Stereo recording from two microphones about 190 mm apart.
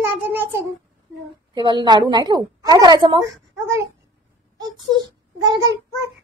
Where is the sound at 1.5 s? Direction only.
25° right (ahead or behind).